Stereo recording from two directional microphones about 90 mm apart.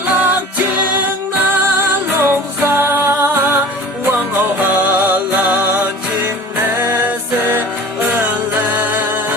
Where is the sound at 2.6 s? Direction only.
25° right (ahead or behind).